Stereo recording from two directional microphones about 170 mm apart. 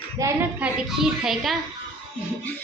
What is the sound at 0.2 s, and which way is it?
Speech, 20° right (ahead or behind).